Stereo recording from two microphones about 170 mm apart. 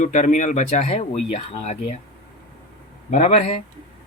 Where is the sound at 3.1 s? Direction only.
45° left (ahead or behind).